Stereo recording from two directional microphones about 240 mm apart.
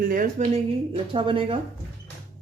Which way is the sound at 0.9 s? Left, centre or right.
Right.